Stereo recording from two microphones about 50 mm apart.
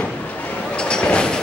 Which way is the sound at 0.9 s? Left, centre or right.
Centre.